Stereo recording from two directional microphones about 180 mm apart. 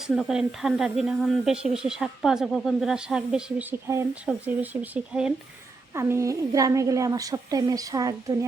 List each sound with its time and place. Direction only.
0.0 s a woman's voice: centre (ahead or behind); by 8.4 s 20° right (ahead or behind)